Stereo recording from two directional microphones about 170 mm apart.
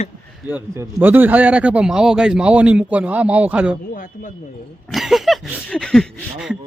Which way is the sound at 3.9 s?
55° left (ahead or behind).